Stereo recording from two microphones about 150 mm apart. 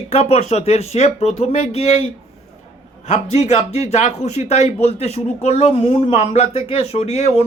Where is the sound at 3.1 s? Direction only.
45° left (ahead or behind).